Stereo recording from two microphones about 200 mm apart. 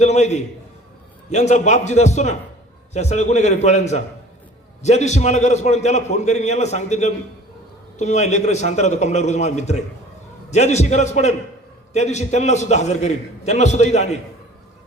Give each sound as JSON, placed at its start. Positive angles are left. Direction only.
{"t": 0.0, "sound": "a man's voice", "side_deg": 35}